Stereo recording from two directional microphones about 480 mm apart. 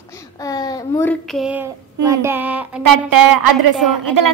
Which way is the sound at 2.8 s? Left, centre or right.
Right.